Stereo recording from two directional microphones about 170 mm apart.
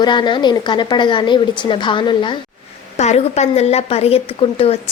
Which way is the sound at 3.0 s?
40° left (ahead or behind).